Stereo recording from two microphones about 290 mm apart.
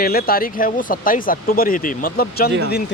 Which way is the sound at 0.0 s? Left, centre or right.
Left.